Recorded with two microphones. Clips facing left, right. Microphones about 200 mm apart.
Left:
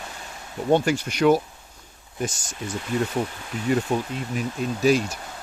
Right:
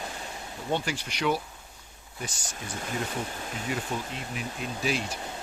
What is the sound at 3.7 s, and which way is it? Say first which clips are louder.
Speech: left 10 dB; 50° left (ahead or behind).